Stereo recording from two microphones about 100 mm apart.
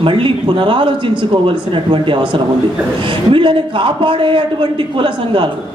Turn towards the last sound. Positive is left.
turn(degrees=-60)  # may be behind; listen again after turning